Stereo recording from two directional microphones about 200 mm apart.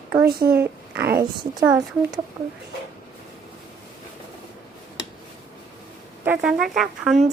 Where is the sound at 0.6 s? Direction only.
10° right (ahead or behind).